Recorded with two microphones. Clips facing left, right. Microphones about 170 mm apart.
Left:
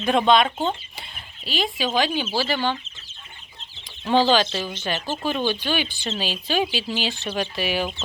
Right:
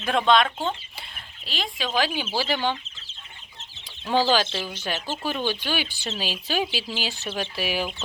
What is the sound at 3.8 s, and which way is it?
Speech, 10° right (ahead or behind).